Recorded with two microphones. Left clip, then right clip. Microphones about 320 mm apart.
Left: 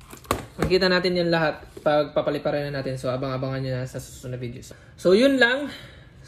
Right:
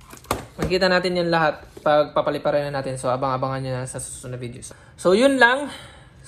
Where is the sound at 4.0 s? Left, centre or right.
Centre.